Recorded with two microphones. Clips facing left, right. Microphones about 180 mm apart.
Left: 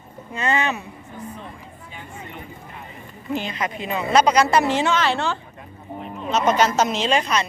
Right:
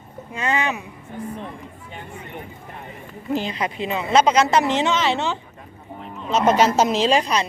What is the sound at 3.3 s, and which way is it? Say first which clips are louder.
A woman's voice: right 2 dB; 35° right (ahead or behind).